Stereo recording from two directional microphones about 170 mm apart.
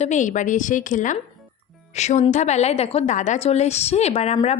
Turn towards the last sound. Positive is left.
turn(degrees=40)  # may be behind; listen again after turning